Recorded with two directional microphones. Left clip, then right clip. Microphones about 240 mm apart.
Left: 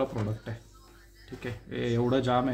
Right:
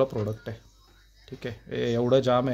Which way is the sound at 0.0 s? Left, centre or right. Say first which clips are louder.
Right 5 dB; right.